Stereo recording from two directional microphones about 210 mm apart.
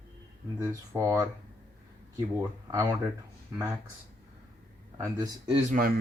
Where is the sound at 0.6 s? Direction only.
15° right (ahead or behind).